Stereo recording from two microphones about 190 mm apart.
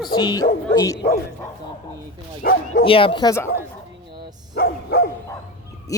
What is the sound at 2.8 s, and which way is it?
Speech, 30° left (ahead or behind).